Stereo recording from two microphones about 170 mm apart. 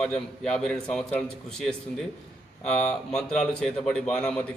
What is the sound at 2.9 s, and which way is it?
A man's voice, 5° left (ahead or behind).